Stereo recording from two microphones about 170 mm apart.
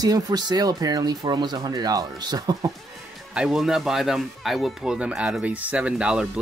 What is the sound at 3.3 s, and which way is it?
Speech, 5° right (ahead or behind).